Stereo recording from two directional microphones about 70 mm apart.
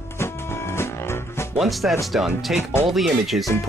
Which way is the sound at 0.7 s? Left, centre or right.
Left.